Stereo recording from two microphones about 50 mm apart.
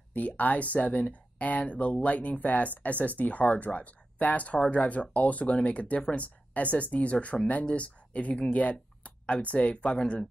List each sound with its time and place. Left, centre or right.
0.1 s speech: left